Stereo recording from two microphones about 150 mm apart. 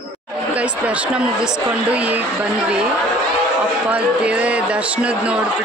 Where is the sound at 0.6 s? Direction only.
10° right (ahead or behind).